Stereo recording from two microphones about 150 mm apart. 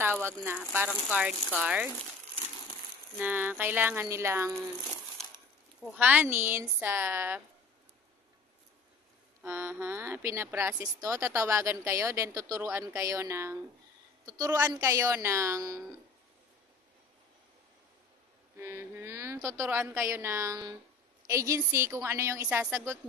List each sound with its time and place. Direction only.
0.0 s a sound: 15° right (ahead or behind)
0.5 s a woman's voice: 10° right (ahead or behind)
3.2 s a woman's voice: 10° right (ahead or behind)
5.9 s a woman's voice: 10° right (ahead or behind)
9.4 s a woman's voice: 15° right (ahead or behind)
18.6 s a woman's voice: 15° right (ahead or behind)